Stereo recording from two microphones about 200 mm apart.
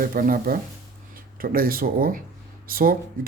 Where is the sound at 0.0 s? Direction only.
45° right (ahead or behind).